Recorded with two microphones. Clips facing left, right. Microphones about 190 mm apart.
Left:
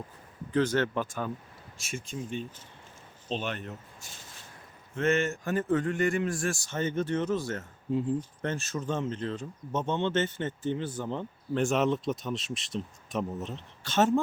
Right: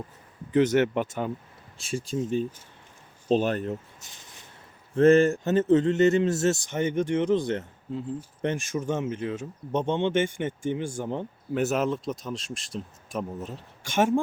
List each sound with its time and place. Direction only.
0.5 s a man's voice: 20° right (ahead or behind)
1.8 s speech: 30° right (ahead or behind)
3.3 s speech: 40° right (ahead or behind)
4.0 s a man's voice: 20° right (ahead or behind)
4.9 s a man's voice: 35° right (ahead or behind); by 7.6 s 20° right (ahead or behind)
7.9 s speech: 15° left (ahead or behind)
8.4 s speech: 15° right (ahead or behind)
13.8 s speech: 10° right (ahead or behind)